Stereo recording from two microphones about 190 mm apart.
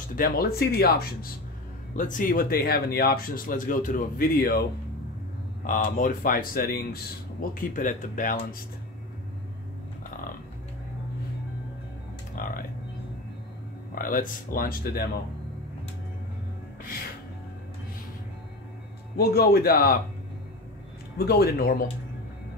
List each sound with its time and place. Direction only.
0.1 s speech: 50° left (ahead or behind)
2.0 s speech: 45° left (ahead or behind)
12.4 s music: 45° left (ahead or behind)
13.9 s speech: 45° left (ahead or behind)
19.1 s speech: 55° left (ahead or behind)
21.2 s speech: 55° left (ahead or behind)